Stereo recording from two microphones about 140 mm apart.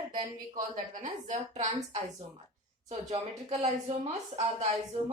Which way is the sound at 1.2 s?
60° right (ahead or behind).